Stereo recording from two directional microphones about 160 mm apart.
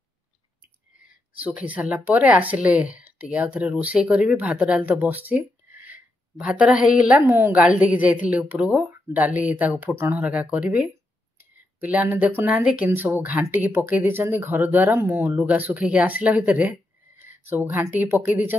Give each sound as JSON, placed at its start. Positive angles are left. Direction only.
{"t": 1.3, "sound": "speech", "side_deg": -10}